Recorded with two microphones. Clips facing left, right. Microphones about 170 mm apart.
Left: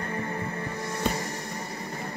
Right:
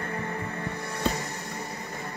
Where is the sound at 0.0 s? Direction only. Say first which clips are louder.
Left 1 dB; 35° left (ahead or behind).